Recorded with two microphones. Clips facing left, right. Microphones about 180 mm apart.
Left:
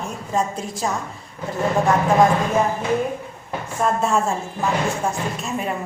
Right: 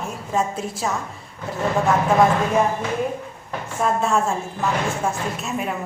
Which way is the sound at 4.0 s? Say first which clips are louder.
Even; centre (ahead or behind).